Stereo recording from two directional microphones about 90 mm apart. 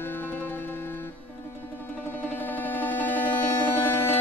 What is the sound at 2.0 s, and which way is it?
Music, 20° left (ahead or behind).